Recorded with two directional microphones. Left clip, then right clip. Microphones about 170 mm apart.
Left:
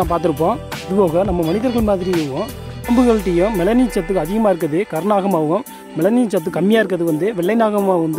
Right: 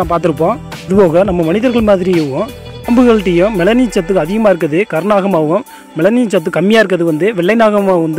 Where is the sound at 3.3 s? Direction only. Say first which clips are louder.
Right 5 dB; 5° right (ahead or behind).